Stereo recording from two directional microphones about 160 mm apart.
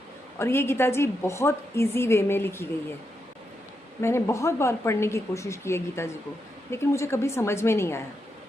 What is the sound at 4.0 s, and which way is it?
A woman's voice, 15° left (ahead or behind).